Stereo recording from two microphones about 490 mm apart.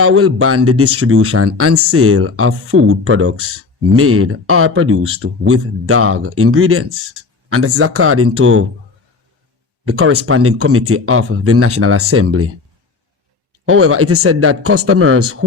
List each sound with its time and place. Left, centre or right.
0.0 s speech: right
9.8 s speech: right
13.7 s speech: right